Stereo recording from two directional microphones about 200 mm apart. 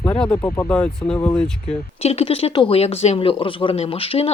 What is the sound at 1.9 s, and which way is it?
Speech, 30° left (ahead or behind).